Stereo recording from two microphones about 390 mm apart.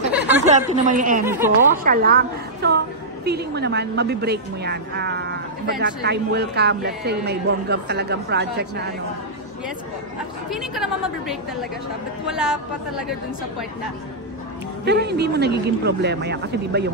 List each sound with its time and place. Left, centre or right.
0.5 s a woman's voice: centre
1.2 s a woman's voice: centre
1.9 s a woman's voice: right
10.5 s a woman's voice: centre
14.9 s a woman's voice: right